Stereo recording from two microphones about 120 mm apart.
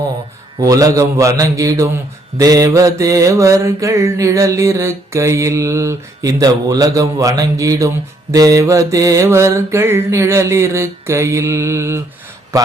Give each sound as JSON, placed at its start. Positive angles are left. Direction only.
{"t": 0.6, "sound": "mantra", "side_deg": -30}